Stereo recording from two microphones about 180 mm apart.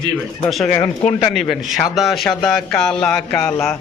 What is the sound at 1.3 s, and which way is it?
Speech, centre (ahead or behind).